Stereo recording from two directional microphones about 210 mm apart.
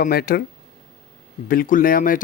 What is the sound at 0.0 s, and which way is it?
Speech, 45° left (ahead or behind).